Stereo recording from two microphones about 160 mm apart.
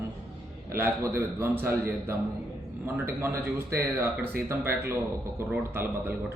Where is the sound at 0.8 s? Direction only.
15° right (ahead or behind).